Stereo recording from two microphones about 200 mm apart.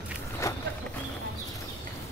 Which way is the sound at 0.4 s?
15° left (ahead or behind).